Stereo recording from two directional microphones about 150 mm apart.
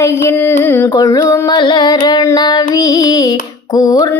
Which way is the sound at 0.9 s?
20° left (ahead or behind).